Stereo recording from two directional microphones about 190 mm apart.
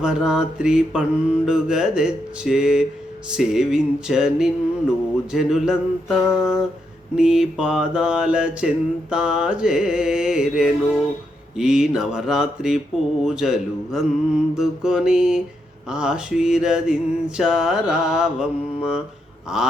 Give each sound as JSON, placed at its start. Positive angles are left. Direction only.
{"t": 0.0, "sound": "mantra", "side_deg": -5}